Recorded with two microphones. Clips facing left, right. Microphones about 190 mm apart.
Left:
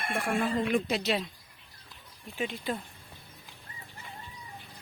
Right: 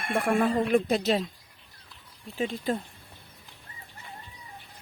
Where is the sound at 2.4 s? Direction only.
40° right (ahead or behind).